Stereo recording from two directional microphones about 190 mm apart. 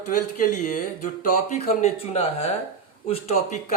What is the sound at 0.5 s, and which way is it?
Speech, 40° left (ahead or behind).